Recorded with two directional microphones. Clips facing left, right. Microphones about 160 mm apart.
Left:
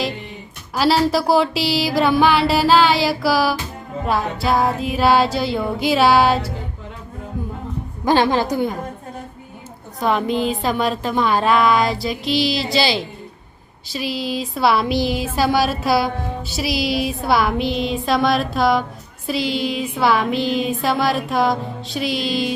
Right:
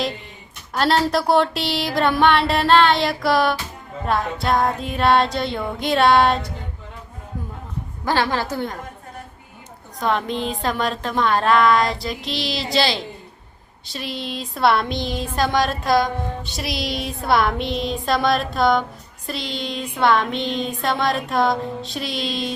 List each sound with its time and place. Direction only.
0.7 s speech: 5° left (ahead or behind)
8.0 s a woman's voice: 20° left (ahead or behind)
10.0 s speech: 5° left (ahead or behind)